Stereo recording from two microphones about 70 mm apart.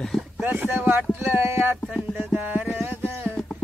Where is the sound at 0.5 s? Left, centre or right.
Right.